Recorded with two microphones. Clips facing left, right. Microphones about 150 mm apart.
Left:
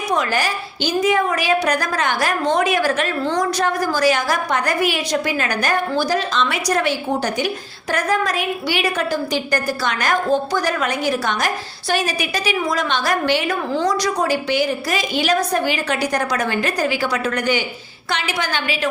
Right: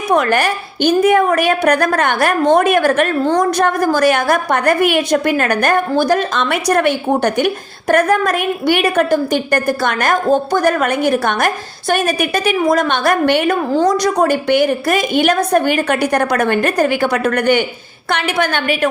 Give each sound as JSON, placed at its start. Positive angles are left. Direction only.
{"t": 0.1, "sound": "a woman's voice", "side_deg": -60}